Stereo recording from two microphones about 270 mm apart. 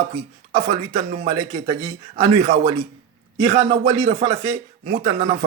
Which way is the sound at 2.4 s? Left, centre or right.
Right.